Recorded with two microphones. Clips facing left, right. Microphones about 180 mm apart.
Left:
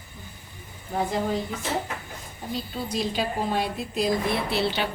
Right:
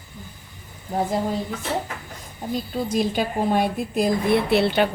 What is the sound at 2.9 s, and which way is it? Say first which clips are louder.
A woman's voice: right 4 dB; 50° right (ahead or behind).